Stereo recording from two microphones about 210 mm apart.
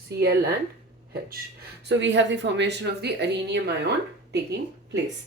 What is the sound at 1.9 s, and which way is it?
A woman's voice, 60° right (ahead or behind).